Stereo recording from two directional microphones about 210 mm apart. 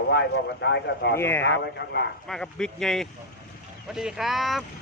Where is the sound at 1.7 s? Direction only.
50° left (ahead or behind).